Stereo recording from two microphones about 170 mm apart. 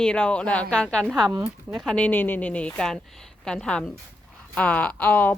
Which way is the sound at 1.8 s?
5° left (ahead or behind).